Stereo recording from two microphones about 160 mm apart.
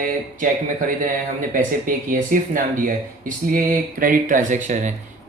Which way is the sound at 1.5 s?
60° right (ahead or behind).